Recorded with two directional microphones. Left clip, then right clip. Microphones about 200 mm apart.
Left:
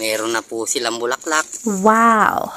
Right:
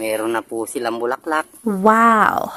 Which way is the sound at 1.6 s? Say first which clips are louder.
Even; centre (ahead or behind).